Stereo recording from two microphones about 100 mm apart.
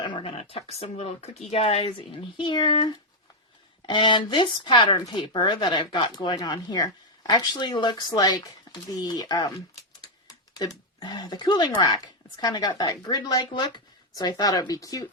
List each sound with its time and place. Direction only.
0.0 s speech: 60° left (ahead or behind); by 15.0 s 35° left (ahead or behind)